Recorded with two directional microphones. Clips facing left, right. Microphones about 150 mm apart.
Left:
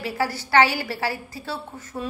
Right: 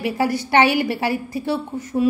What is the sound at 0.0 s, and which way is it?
A woman's voice, 15° right (ahead or behind).